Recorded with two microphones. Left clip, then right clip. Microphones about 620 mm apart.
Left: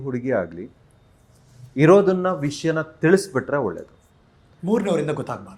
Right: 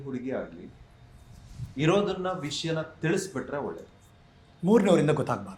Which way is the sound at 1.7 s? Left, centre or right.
Left.